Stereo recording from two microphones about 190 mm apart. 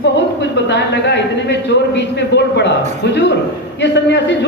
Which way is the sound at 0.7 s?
65° left (ahead or behind).